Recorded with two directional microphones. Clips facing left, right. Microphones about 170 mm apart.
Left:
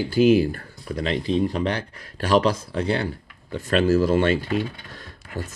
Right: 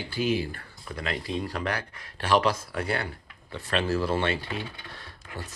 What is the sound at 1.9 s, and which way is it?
Speech, 40° left (ahead or behind).